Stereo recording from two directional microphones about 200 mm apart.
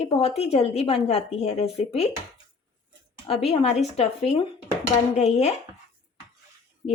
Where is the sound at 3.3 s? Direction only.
30° left (ahead or behind).